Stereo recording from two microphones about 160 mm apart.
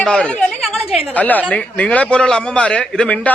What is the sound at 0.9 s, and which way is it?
Speech, 5° right (ahead or behind).